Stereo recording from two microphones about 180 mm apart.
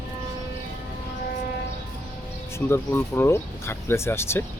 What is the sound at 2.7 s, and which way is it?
Speech, 10° left (ahead or behind).